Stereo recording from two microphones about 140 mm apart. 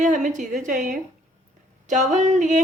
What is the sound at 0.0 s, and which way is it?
A woman's voice, 60° right (ahead or behind).